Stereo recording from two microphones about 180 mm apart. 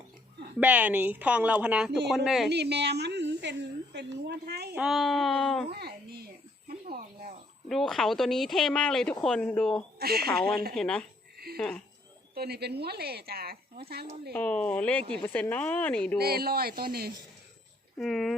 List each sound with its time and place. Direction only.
0.6 s speech: 10° right (ahead or behind)
2.5 s speech: 65° right (ahead or behind)
4.7 s speech: 5° right (ahead or behind)
5.7 s a sound: 60° right (ahead or behind)
7.7 s speech: centre (ahead or behind)
10.0 s speech: 60° right (ahead or behind)
10.8 s speech: 5° left (ahead or behind)
12.3 s speech: 60° right (ahead or behind)
14.3 s a woman's voice: 10° left (ahead or behind)
16.1 s speech: 60° right (ahead or behind)
17.9 s speech: centre (ahead or behind)